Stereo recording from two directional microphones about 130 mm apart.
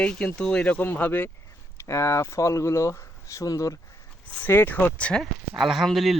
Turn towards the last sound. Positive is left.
turn(degrees=0)  # may be behind; listen again after turning